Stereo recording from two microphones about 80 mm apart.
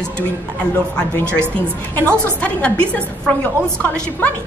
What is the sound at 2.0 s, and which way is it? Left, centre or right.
A woman's voice, centre.